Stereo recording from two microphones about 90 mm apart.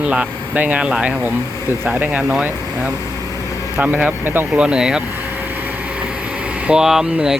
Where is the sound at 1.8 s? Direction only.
20° right (ahead or behind).